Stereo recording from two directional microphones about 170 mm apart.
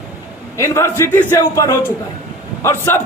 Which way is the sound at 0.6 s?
15° left (ahead or behind).